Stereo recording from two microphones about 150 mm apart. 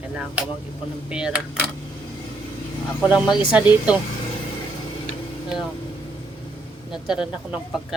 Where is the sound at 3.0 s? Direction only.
Centre (ahead or behind).